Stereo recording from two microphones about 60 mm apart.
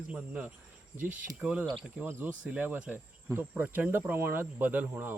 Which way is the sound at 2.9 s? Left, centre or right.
Right.